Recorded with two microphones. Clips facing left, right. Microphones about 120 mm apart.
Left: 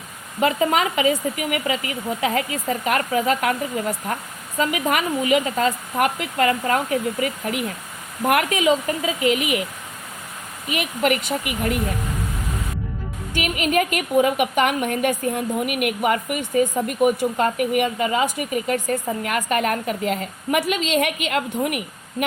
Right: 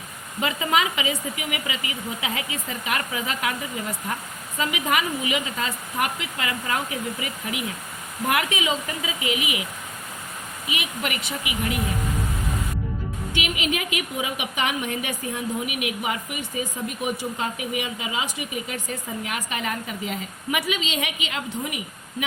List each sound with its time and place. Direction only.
0.4 s a woman's voice: 45° left (ahead or behind)
10.7 s a woman's voice: 50° left (ahead or behind)
13.3 s a woman's voice: 45° left (ahead or behind); by 20.6 s 60° left (ahead or behind)
20.6 s a woman's voice: 45° left (ahead or behind)